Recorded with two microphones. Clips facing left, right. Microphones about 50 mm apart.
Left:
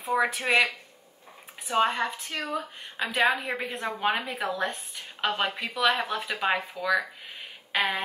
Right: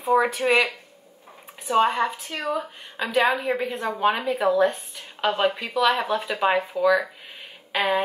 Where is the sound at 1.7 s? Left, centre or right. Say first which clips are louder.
Right 4 dB; centre.